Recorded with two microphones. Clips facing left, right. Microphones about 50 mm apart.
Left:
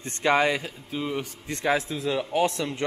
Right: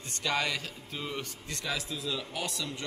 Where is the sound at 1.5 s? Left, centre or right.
Left.